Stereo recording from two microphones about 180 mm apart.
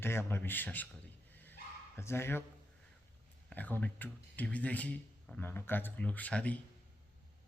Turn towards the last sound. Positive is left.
turn(degrees=5)  # may be behind; listen again after turning